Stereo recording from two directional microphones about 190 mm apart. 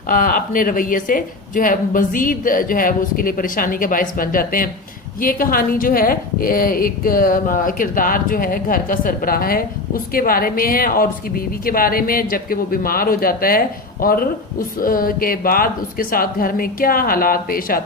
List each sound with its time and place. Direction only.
0.1 s a woman's voice: 45° left (ahead or behind)